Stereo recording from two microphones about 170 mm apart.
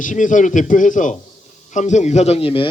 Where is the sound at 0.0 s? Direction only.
50° left (ahead or behind).